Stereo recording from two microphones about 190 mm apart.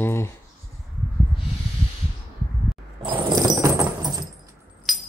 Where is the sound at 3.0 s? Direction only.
25° right (ahead or behind).